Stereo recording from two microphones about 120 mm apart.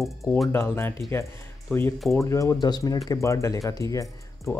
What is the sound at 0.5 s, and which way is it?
Speech, 20° left (ahead or behind).